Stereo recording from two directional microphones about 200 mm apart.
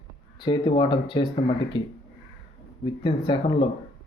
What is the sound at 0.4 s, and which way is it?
Speech, 20° left (ahead or behind).